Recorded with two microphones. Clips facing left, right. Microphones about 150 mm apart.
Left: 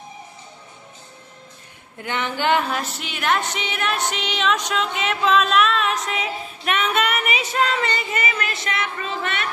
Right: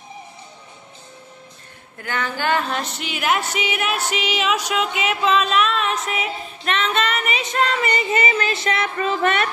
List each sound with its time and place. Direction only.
2.0 s a sound: 20° left (ahead or behind)
2.7 s music: centre (ahead or behind)
6.6 s female singing: 10° left (ahead or behind)
8.1 s a woman's voice: 30° right (ahead or behind); by 9.5 s 45° right (ahead or behind)